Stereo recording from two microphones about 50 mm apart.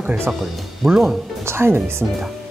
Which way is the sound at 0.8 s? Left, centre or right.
Centre.